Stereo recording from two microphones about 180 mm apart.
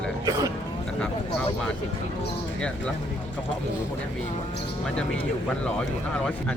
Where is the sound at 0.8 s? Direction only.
5° left (ahead or behind).